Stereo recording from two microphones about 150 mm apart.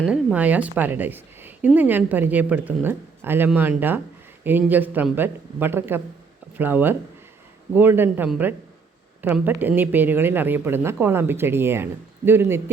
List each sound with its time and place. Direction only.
0.1 s a woman's voice: 10° right (ahead or behind)